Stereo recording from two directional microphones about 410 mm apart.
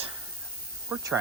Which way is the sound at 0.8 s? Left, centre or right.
Centre.